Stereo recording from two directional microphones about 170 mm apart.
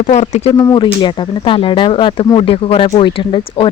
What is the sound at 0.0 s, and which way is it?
Speech, 45° left (ahead or behind).